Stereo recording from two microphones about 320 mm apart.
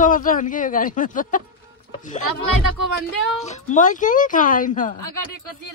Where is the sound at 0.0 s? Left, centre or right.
Left.